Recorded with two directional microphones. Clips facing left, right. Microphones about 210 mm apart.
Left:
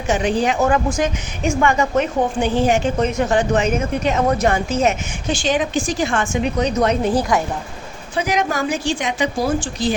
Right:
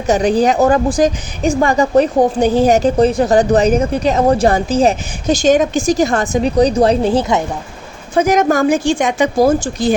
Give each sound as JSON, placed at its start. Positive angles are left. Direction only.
{"t": 0.1, "sound": "a woman's voice", "side_deg": -40}
{"t": 8.1, "sound": "speech", "side_deg": -45}